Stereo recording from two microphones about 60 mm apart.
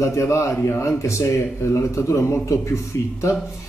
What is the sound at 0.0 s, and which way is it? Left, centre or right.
A man's voice, left.